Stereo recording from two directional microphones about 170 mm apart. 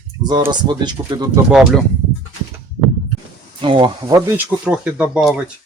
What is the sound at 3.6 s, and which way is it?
Speech, 30° right (ahead or behind).